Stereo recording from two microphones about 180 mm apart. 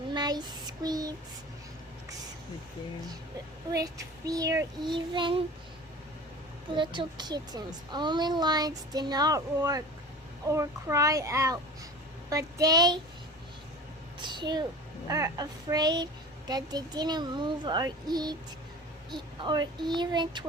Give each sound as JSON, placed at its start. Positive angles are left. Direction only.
{"t": 0.1, "sound": "child singing", "side_deg": -25}
{"t": 3.7, "sound": "speech", "side_deg": -20}
{"t": 6.7, "sound": "a child's voice", "side_deg": -25}
{"t": 14.2, "sound": "speech", "side_deg": -25}